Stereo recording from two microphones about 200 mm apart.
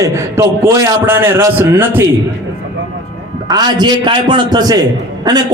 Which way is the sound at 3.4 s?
20° right (ahead or behind).